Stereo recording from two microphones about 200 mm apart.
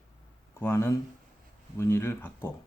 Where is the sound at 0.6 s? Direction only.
10° left (ahead or behind).